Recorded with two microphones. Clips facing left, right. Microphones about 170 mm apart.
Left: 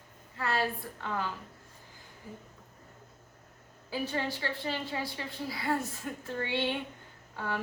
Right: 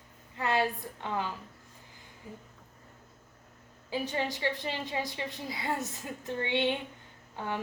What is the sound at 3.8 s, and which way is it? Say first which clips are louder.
A woman's voice: right 1 dB; 15° right (ahead or behind).